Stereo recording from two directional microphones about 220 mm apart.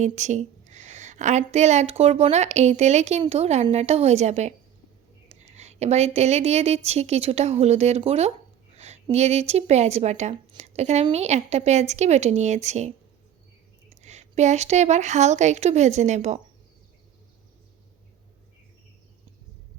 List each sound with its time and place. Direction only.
0.0 s a woman's voice: 30° right (ahead or behind)
8.7 s a sound: 30° right (ahead or behind)
9.0 s a woman's voice: 30° right (ahead or behind)
13.9 s a woman's voice: 30° right (ahead or behind)